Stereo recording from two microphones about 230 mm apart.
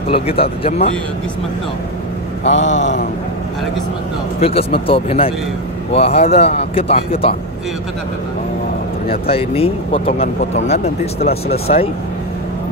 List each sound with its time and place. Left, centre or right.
0.1 s speech: left
2.5 s speech: left
4.4 s speech: left
9.3 s speech: left